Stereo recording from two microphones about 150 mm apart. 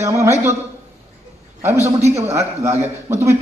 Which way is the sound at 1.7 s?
45° right (ahead or behind).